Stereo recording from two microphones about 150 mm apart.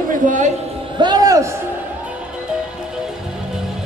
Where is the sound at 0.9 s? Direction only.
30° right (ahead or behind).